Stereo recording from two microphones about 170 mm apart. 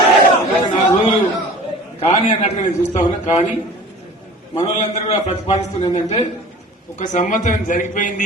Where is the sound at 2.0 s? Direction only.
35° left (ahead or behind).